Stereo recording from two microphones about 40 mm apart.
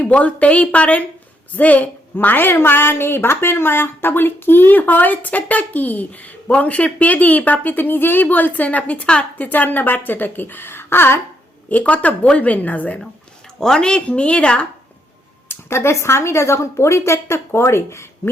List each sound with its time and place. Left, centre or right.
0.1 s a woman's voice: left
2.1 s a woman's voice: left
11.7 s speech: left
13.6 s speech: centre
14.1 s a woman's voice: left
15.4 s a woman's voice: left